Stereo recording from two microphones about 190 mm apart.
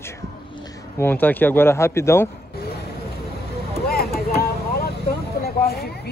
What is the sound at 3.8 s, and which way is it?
Vehicle, 55° left (ahead or behind).